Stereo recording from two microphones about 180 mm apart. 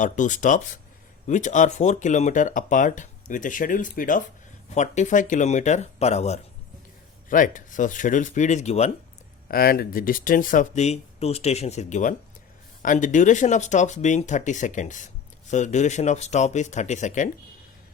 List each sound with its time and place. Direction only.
0.0 s speech: 45° left (ahead or behind)
7.3 s speech: 50° left (ahead or behind)
9.5 s speech: 55° left (ahead or behind)